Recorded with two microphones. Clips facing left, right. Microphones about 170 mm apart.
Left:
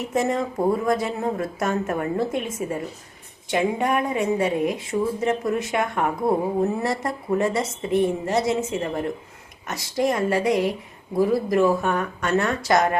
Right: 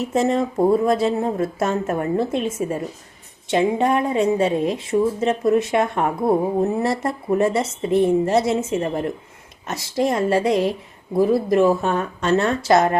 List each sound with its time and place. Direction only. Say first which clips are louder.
0.0 s a woman's voice: right 4 dB; 25° right (ahead or behind)